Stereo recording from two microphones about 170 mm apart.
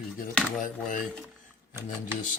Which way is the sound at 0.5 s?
50° left (ahead or behind).